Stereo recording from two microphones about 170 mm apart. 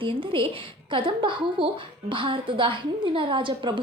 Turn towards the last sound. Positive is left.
turn(degrees=-30)  # may be behind; listen again after turning